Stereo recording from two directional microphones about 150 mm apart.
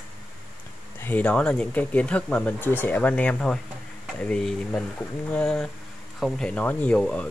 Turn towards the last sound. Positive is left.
turn(degrees=5)  # may be behind; listen again after turning